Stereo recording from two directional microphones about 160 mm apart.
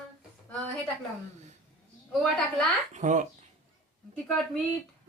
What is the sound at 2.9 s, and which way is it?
Speech, 50° right (ahead or behind).